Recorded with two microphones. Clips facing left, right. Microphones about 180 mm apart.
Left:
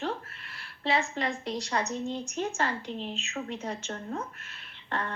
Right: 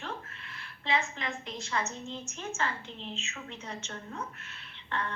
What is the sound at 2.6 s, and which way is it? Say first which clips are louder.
A woman's voice: left 4 dB; 40° left (ahead or behind).